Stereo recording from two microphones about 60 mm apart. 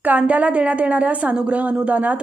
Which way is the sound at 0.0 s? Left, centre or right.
Right.